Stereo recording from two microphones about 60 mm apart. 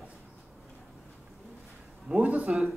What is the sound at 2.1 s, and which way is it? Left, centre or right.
Speech, right.